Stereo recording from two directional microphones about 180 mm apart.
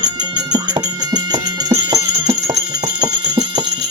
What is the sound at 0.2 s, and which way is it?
Music, 20° right (ahead or behind).